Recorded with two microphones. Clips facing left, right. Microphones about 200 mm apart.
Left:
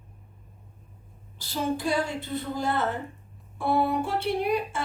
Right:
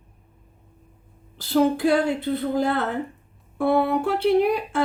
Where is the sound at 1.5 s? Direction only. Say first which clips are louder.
Right 8 dB; 60° right (ahead or behind).